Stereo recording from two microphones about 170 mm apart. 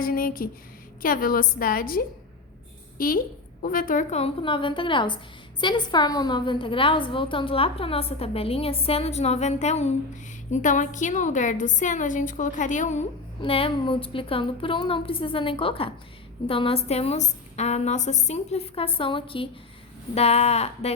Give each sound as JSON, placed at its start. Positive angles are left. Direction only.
{"t": 0.0, "sound": "a woman's voice", "side_deg": 55}
{"t": 4.2, "sound": "a woman's voice", "side_deg": 30}
{"t": 13.4, "sound": "a woman's voice", "side_deg": 30}